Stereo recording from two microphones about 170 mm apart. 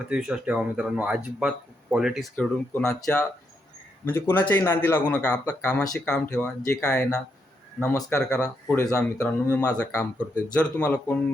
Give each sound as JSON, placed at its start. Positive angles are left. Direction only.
{"t": 0.0, "sound": "speech", "side_deg": -5}
{"t": 2.3, "sound": "a man's voice", "side_deg": 5}